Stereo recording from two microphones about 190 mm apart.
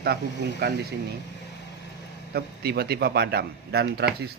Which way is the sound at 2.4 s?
55° right (ahead or behind).